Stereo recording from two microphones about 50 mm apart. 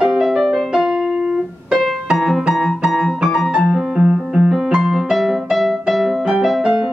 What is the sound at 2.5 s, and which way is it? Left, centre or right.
Piano, centre.